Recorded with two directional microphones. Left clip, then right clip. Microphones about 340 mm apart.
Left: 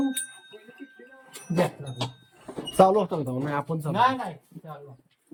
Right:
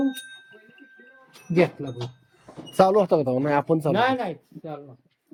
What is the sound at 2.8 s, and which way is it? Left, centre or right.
Speech, centre.